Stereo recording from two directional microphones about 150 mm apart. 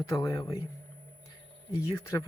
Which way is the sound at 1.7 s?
25° left (ahead or behind).